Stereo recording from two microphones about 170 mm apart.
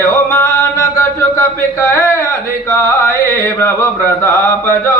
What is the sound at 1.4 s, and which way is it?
Chant, 15° left (ahead or behind).